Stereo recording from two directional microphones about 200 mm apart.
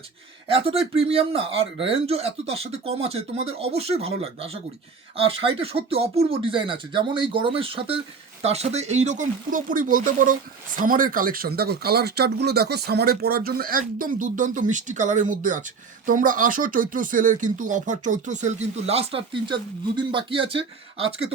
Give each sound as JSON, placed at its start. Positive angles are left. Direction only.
{"t": 0.4, "sound": "speech", "side_deg": -30}